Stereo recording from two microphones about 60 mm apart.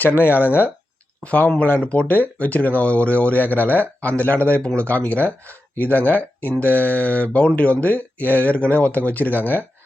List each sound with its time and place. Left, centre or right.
0.0 s speech: left
1.2 s speech: left